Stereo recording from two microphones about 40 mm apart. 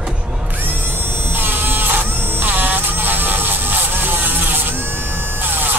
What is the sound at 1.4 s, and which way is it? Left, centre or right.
Printer, right.